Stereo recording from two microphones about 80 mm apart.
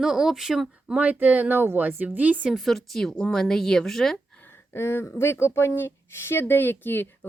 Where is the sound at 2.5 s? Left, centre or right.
Centre.